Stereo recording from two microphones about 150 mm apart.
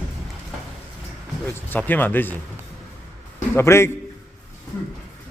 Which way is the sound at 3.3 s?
15° left (ahead or behind).